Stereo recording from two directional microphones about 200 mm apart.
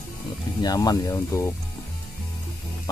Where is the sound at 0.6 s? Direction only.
20° left (ahead or behind).